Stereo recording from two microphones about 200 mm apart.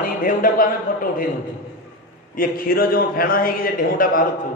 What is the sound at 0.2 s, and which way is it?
A man's voice, 45° left (ahead or behind).